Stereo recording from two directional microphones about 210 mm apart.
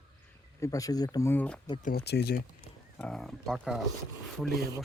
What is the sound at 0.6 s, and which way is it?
Speech, 15° left (ahead or behind).